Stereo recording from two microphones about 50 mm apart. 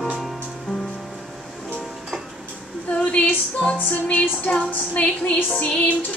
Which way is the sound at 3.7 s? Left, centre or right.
Left.